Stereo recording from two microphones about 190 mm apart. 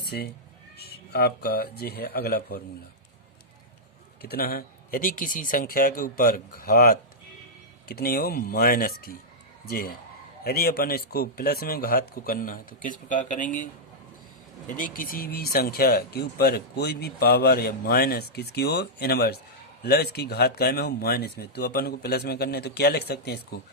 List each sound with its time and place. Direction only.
0.0 s neigh: 60° left (ahead or behind)
0.8 s a man's voice: 55° left (ahead or behind)
4.2 s a man's voice: 55° left (ahead or behind)
14.8 s speech: 45° left (ahead or behind)